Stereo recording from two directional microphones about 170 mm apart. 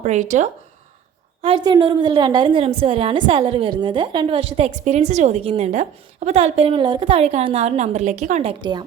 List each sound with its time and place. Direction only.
0.0 s speech: 45° right (ahead or behind)
1.4 s a woman's voice: 30° right (ahead or behind)